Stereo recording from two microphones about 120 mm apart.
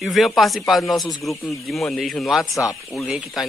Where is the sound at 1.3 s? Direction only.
25° left (ahead or behind).